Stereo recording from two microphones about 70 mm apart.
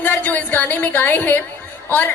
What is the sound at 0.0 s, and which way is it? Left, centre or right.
A woman's voice, left.